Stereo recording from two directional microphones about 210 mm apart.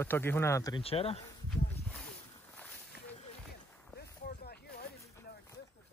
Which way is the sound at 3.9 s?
50° left (ahead or behind).